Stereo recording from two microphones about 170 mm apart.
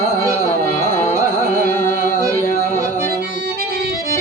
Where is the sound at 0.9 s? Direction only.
15° left (ahead or behind).